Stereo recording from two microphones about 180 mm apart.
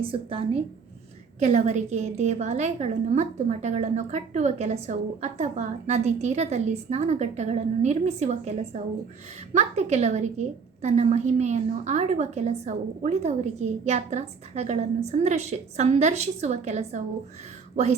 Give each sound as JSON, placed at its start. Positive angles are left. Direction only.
{"t": 0.0, "sound": "a woman's voice", "side_deg": -30}